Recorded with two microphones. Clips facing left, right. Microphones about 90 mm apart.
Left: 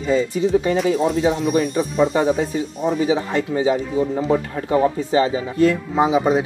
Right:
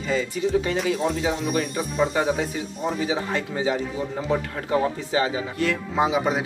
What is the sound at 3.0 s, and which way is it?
Speech, 25° left (ahead or behind).